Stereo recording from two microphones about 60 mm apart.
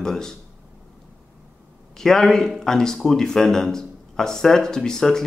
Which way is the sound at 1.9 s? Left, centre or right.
Centre.